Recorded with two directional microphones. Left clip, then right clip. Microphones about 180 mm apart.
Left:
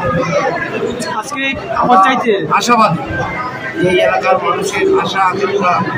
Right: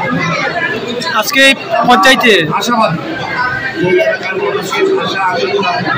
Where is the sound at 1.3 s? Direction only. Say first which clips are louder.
Right 9 dB; 10° right (ahead or behind).